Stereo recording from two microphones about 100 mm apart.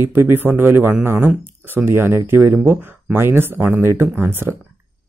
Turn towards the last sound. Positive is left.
turn(degrees=-25)  # may be behind; listen again after turning